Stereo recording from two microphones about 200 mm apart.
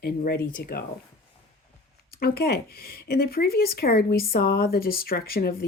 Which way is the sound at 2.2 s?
50° left (ahead or behind).